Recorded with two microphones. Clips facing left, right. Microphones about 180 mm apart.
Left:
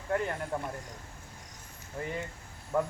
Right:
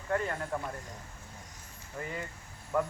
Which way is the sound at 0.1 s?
15° left (ahead or behind).